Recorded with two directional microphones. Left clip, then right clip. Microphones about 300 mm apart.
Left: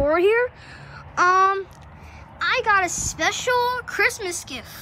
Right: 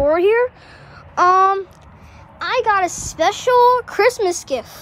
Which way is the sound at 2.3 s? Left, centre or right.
Centre.